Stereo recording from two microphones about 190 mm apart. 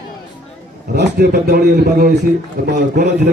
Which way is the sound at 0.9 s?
60° right (ahead or behind).